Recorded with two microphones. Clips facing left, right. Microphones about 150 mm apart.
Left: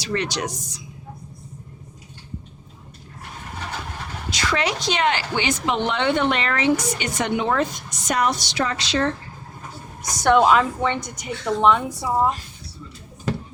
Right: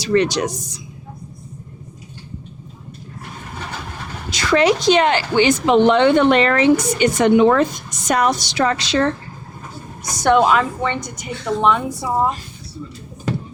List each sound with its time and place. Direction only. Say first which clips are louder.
0.0 s a woman's voice: right 9 dB; 35° right (ahead or behind)
4.4 s a woman's voice: right 9 dB; 40° right (ahead or behind)
7.3 s a woman's voice: right 9 dB; 70° right (ahead or behind)
10.2 s a woman's voice: right 2 dB; 15° right (ahead or behind)